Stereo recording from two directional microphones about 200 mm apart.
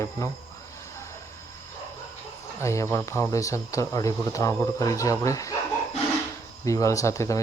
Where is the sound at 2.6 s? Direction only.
15° left (ahead or behind).